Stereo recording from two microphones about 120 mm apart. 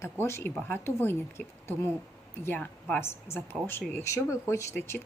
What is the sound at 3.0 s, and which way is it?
A woman's voice, 20° left (ahead or behind).